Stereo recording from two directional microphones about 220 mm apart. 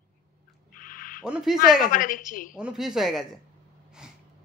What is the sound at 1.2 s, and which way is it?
Speech, 5° right (ahead or behind).